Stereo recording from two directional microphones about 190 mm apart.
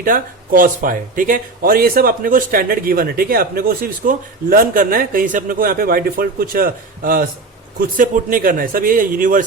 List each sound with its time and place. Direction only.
0.0 s speech: 45° right (ahead or behind)